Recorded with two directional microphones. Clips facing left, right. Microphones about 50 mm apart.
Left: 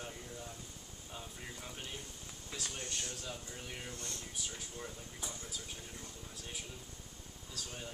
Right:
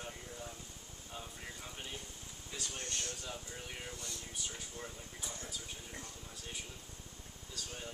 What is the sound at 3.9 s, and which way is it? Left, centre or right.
Speech, left.